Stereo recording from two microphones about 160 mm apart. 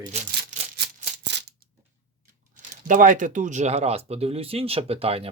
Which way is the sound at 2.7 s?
55° right (ahead or behind).